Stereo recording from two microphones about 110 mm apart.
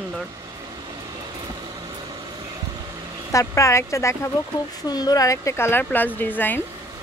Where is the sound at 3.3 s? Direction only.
25° left (ahead or behind).